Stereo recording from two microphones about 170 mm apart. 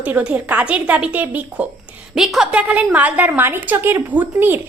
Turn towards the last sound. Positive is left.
turn(degrees=-10)  # may be behind; listen again after turning